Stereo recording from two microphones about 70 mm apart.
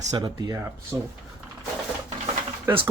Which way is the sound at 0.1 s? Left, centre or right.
Right.